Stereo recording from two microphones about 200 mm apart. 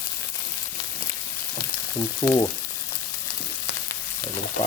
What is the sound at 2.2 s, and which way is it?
Frying, 15° left (ahead or behind).